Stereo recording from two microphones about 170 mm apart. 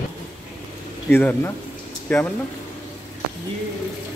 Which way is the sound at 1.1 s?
10° left (ahead or behind).